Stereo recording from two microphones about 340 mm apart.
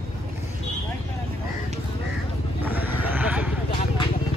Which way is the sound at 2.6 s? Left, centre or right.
Centre.